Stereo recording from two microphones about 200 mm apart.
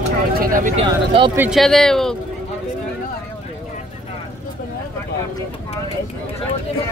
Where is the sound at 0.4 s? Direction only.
45° right (ahead or behind).